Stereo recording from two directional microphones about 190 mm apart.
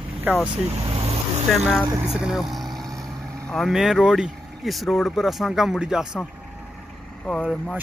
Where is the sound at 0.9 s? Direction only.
30° right (ahead or behind).